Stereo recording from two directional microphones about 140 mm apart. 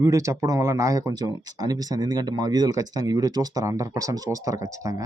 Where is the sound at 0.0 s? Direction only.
20° right (ahead or behind).